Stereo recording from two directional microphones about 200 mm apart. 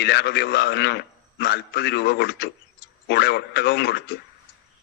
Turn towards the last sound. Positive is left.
turn(degrees=55)  # may be behind; listen again after turning